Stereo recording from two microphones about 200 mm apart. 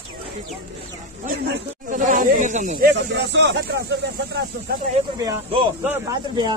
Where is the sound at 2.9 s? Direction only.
60° right (ahead or behind).